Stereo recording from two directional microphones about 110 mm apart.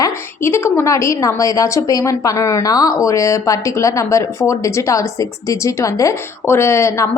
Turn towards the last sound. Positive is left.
turn(degrees=30)  # may be behind; listen again after turning